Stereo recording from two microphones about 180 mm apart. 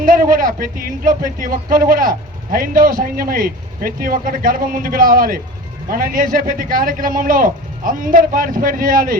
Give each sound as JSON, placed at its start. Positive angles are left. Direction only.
{"t": 0.0, "sound": "speech", "side_deg": -50}